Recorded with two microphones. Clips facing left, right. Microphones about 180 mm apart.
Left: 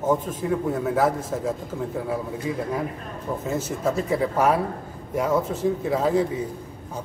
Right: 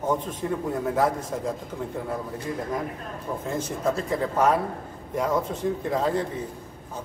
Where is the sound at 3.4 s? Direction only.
5° left (ahead or behind).